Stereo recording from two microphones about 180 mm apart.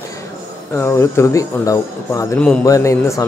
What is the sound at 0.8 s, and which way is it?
Speech, 15° left (ahead or behind).